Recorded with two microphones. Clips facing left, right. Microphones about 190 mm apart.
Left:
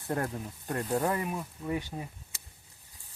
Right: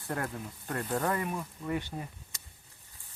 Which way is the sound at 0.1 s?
20° left (ahead or behind).